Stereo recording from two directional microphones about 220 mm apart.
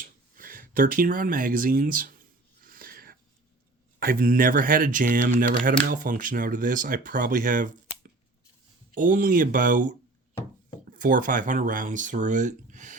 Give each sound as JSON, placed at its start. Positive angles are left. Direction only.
{"t": 0.0, "sound": "a sound", "side_deg": -40}
{"t": 4.0, "sound": "speech", "side_deg": -40}
{"t": 10.9, "sound": "speech", "side_deg": -40}